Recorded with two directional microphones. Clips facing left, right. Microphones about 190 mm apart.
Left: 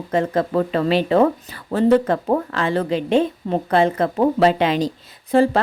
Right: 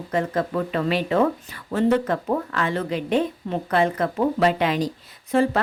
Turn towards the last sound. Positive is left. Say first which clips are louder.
# left 4 dB
turn(degrees=30)  # may be behind; listen again after turning